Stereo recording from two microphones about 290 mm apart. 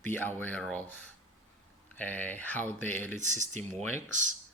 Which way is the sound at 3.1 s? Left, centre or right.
Right.